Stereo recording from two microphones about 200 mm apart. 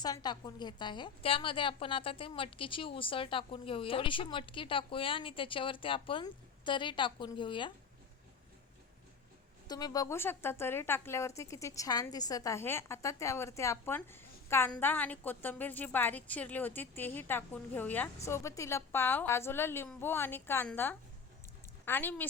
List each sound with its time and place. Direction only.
0.0 s a woman's voice: 20° left (ahead or behind)
9.6 s a woman's voice: 20° left (ahead or behind)